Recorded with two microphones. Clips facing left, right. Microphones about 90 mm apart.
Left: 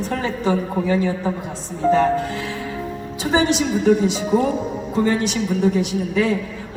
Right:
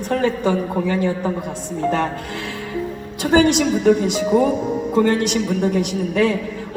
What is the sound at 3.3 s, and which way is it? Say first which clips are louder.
A woman's voice: right 3 dB; 60° right (ahead or behind).